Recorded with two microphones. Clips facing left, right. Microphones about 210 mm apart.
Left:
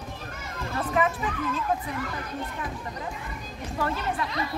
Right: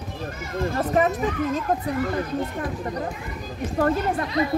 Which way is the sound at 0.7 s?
40° right (ahead or behind).